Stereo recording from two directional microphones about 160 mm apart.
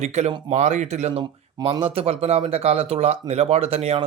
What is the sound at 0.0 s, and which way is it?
Speech, 45° right (ahead or behind).